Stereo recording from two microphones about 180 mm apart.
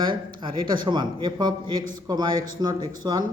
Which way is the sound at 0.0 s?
25° right (ahead or behind).